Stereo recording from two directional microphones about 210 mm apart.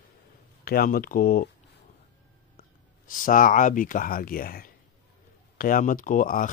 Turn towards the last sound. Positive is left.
turn(degrees=40)  # may be behind; listen again after turning